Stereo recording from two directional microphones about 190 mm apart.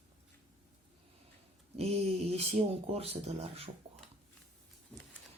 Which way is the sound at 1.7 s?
35° right (ahead or behind).